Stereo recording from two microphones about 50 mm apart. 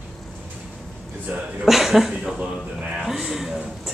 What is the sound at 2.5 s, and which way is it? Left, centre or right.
Speech, right.